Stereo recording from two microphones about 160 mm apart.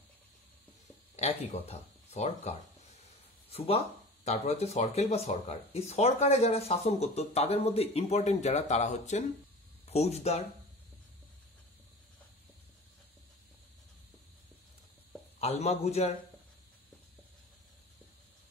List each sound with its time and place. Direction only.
1.1 s speech: 45° left (ahead or behind)
3.5 s speech: 40° left (ahead or behind)
15.4 s speech: 40° left (ahead or behind)